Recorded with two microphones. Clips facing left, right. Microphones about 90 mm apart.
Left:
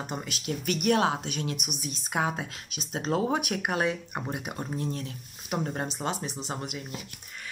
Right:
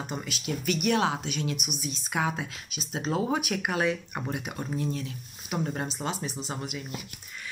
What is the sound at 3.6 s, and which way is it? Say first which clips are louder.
Speech: even; 40° left (ahead or behind).